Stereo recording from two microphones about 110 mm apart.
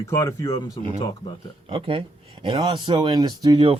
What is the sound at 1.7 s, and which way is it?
Speech, 55° right (ahead or behind).